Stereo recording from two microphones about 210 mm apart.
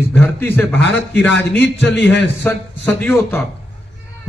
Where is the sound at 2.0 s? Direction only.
55° left (ahead or behind).